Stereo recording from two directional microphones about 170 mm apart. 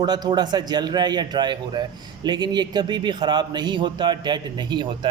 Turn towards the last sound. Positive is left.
turn(degrees=-25)  # may be behind; listen again after turning